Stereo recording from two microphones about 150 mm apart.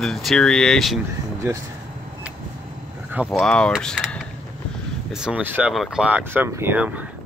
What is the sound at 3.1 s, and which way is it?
Speech, 5° right (ahead or behind).